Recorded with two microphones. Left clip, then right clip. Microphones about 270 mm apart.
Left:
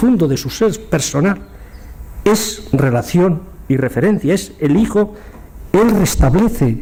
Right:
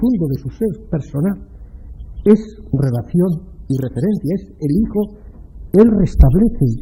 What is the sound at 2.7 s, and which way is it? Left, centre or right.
A man's voice, centre.